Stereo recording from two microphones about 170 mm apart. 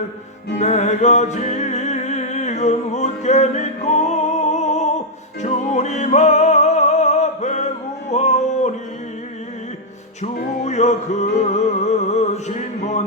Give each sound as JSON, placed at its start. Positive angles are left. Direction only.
{"t": 0.6, "sound": "music", "side_deg": 40}
{"t": 10.6, "sound": "music", "side_deg": 40}